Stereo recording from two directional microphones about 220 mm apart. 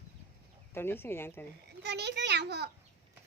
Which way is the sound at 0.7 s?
10° left (ahead or behind).